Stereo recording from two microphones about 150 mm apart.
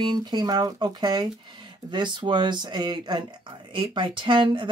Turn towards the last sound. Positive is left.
turn(degrees=-35)  # may be behind; listen again after turning